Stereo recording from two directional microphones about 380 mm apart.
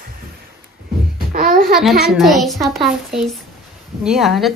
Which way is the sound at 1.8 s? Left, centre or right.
Centre.